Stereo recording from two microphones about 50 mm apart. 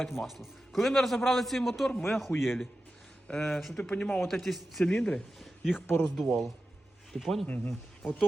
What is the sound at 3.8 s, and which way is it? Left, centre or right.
Speech, left.